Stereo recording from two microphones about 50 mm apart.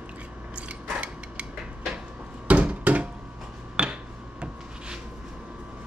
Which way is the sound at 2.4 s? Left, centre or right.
Right.